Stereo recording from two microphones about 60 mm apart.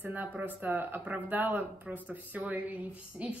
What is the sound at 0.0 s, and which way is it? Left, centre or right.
A woman's voice, right.